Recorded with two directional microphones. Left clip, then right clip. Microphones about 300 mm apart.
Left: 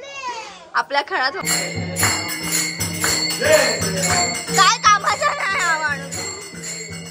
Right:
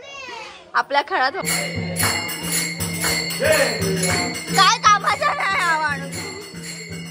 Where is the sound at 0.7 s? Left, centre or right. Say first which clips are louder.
Right 1 dB; centre.